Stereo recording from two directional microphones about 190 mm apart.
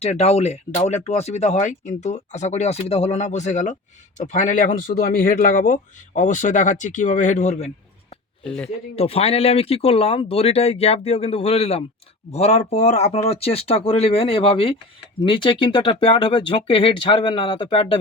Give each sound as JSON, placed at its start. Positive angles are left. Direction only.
{"t": 0.0, "sound": "speech", "side_deg": 35}
{"t": 8.4, "sound": "speech", "side_deg": 5}
{"t": 9.0, "sound": "speech", "side_deg": 30}